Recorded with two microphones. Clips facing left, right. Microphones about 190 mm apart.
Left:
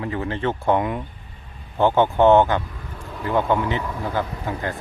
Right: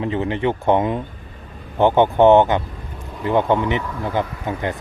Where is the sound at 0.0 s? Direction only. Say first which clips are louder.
Right 4 dB; 20° right (ahead or behind).